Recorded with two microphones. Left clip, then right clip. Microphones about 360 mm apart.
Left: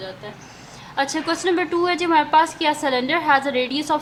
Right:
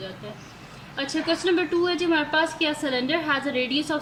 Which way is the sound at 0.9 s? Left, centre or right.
Centre.